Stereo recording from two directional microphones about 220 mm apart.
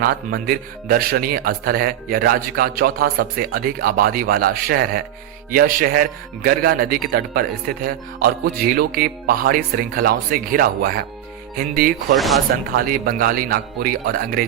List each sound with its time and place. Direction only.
0.0 s speech: 40° right (ahead or behind)
12.1 s speech: centre (ahead or behind)
12.7 s speech: 40° right (ahead or behind)